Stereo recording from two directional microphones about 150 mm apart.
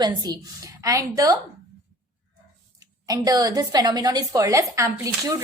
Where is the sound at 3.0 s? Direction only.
25° right (ahead or behind).